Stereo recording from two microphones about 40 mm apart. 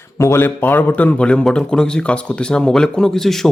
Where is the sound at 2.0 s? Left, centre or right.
Left; by 3.5 s centre.